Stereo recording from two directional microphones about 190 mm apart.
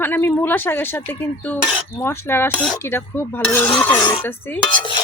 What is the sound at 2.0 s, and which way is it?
Dishes, 15° left (ahead or behind).